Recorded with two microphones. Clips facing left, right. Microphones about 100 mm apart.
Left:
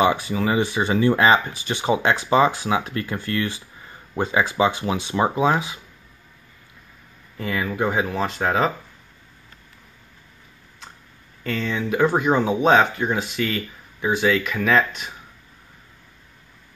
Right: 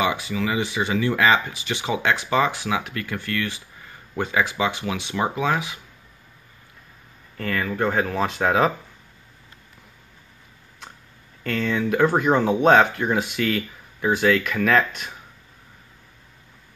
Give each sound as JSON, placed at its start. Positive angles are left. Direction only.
{"t": 0.0, "sound": "speech", "side_deg": 35}
{"t": 7.3, "sound": "speech", "side_deg": 10}
{"t": 11.4, "sound": "speech", "side_deg": 0}